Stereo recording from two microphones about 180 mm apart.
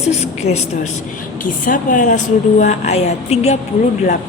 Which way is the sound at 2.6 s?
40° left (ahead or behind).